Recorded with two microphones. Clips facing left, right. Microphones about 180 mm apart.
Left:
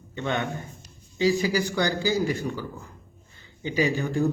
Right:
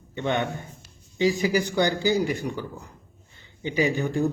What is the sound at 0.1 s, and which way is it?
A man's voice, 20° right (ahead or behind).